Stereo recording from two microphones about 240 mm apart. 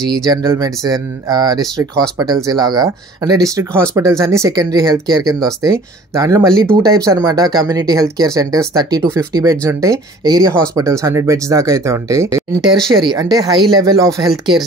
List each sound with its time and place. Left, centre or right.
0.0 s speech: centre